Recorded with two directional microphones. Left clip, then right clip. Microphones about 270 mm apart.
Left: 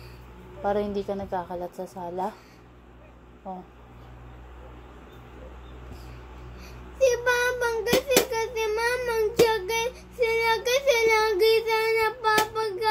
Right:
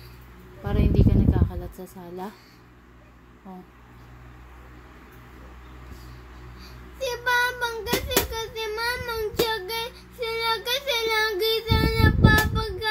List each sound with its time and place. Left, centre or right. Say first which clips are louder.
0.7 s speech: left 1 dB; right
7.0 s child singing: left 2 dB; centre